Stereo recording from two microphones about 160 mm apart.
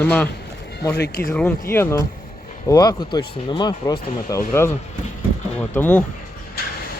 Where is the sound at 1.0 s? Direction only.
75° left (ahead or behind).